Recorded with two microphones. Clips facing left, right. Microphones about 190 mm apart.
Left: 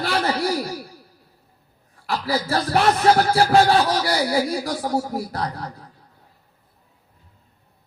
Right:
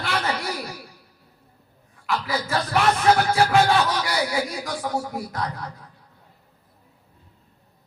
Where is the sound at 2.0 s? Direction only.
35° left (ahead or behind).